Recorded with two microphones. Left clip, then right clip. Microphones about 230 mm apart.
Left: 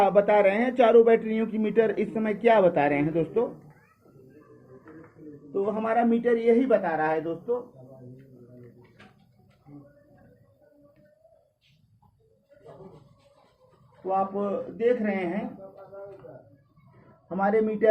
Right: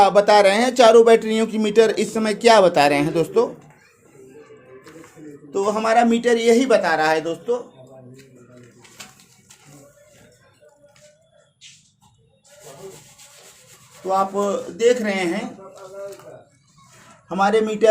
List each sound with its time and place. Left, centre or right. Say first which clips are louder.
0.0 s speech: right 7 dB; right
5.5 s speech: right 8 dB; centre
14.8 s speech: right 7 dB; right
17.2 s speech: right 6 dB; right